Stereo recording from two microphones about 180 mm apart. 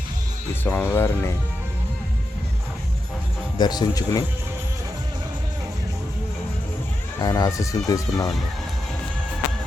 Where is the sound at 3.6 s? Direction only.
20° left (ahead or behind).